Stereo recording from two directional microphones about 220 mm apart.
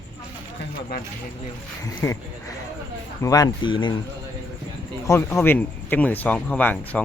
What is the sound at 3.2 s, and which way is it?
Speech, 15° left (ahead or behind).